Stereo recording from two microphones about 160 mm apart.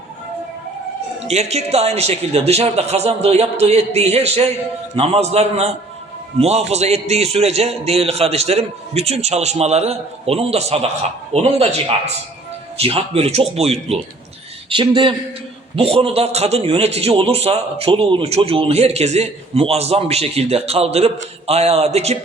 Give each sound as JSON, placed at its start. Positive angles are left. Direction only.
{"t": 1.3, "sound": "a man's voice", "side_deg": -40}
{"t": 12.7, "sound": "a man's voice", "side_deg": -40}